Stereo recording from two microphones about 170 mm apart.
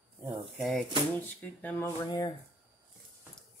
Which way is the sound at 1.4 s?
10° left (ahead or behind).